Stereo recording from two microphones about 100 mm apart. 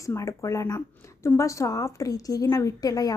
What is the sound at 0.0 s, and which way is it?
A woman's voice, 30° left (ahead or behind).